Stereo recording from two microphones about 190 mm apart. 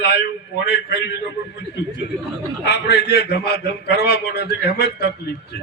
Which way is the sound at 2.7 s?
60° left (ahead or behind).